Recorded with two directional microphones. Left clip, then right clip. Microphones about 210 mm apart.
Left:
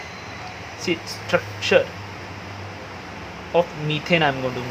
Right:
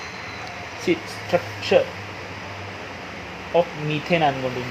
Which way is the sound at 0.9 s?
15° right (ahead or behind).